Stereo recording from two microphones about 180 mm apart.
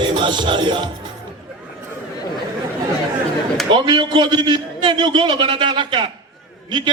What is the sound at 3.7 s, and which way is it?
A man's voice, 25° right (ahead or behind).